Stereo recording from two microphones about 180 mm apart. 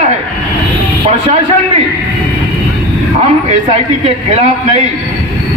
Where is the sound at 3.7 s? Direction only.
35° right (ahead or behind).